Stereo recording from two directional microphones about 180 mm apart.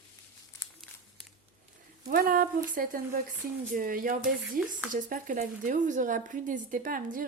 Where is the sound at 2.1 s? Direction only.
55° right (ahead or behind).